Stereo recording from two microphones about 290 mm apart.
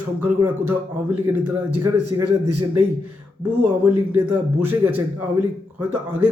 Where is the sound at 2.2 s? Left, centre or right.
Right.